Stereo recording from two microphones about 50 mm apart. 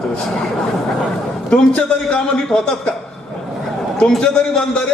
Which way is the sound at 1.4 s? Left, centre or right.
Centre.